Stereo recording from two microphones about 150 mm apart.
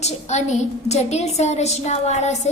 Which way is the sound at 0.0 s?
50° left (ahead or behind).